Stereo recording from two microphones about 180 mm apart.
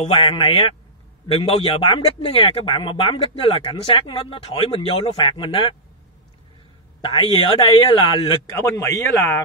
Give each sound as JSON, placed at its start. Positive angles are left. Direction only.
{"t": 0.0, "sound": "speech", "side_deg": 30}
{"t": 7.0, "sound": "speech", "side_deg": 30}
{"t": 8.5, "sound": "speech", "side_deg": 15}